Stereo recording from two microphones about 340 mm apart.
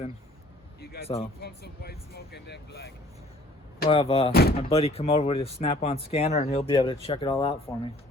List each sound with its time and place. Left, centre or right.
1.4 s speech: left
3.8 s speech: centre
4.3 s speech: left